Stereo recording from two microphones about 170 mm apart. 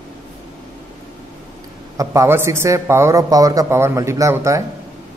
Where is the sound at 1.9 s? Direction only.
15° right (ahead or behind).